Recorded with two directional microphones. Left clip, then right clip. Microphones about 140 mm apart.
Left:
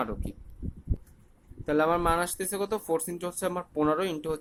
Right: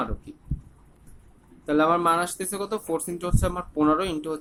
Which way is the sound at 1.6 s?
20° left (ahead or behind).